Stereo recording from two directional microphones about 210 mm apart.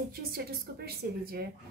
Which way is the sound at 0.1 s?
45° right (ahead or behind).